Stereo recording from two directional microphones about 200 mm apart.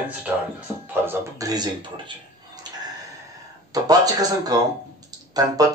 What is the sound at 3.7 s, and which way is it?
Speech, 20° right (ahead or behind).